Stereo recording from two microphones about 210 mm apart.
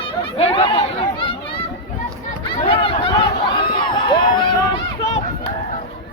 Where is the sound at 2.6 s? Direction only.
25° left (ahead or behind).